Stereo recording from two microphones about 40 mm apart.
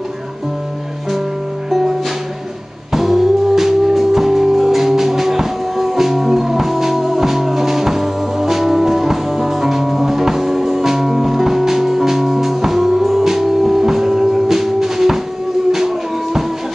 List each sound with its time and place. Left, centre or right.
1.7 s music: centre